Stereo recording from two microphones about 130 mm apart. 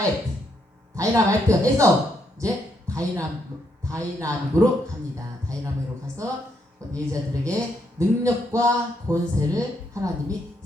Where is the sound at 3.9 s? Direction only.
25° right (ahead or behind).